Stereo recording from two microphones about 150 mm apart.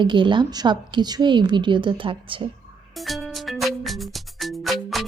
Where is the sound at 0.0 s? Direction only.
30° right (ahead or behind).